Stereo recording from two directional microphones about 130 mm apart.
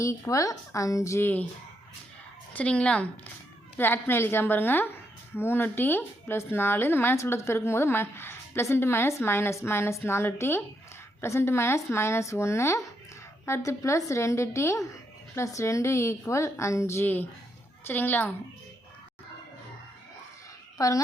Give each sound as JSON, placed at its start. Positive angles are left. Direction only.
{"t": 0.0, "sound": "a woman's voice", "side_deg": 25}
{"t": 2.5, "sound": "a woman's voice", "side_deg": 10}
{"t": 20.7, "sound": "speech", "side_deg": 25}